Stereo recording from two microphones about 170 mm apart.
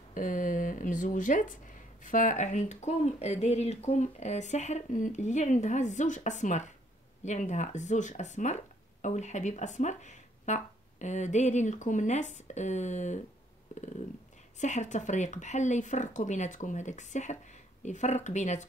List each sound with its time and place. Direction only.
0.1 s speech: 50° left (ahead or behind)
13.7 s a sound: 45° left (ahead or behind)
14.6 s speech: 45° left (ahead or behind)